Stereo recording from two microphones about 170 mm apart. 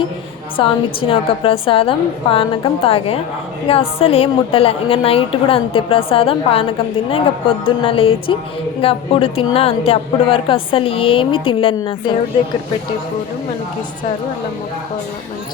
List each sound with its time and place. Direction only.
0.5 s a woman's voice: 30° left (ahead or behind)